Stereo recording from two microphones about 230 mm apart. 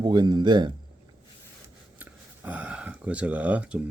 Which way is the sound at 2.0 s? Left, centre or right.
Centre.